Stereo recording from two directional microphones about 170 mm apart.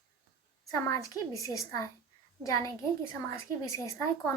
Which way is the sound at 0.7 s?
20° left (ahead or behind).